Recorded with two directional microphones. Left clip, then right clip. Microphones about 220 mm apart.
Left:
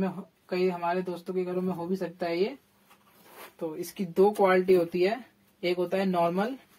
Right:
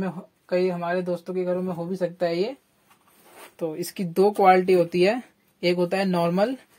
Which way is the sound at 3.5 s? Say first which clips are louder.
Right 5 dB; 50° right (ahead or behind).